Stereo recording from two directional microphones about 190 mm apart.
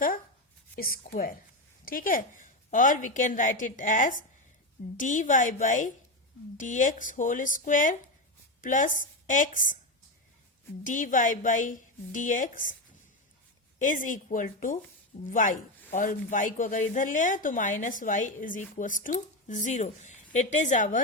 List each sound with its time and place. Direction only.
0.8 s speech: 50° left (ahead or behind)
10.8 s speech: 45° left (ahead or behind)
13.7 s a woman's voice: 45° left (ahead or behind)